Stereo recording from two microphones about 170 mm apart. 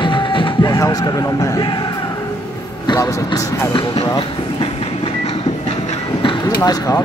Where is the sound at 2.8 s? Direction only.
20° left (ahead or behind).